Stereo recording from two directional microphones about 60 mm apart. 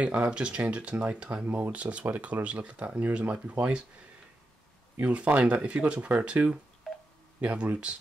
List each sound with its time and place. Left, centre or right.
0.0 s speech: right
5.0 s speech: right
6.8 s telephone dialing: centre
7.3 s speech: right